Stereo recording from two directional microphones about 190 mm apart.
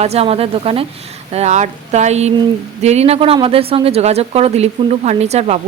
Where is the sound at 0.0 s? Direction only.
35° right (ahead or behind).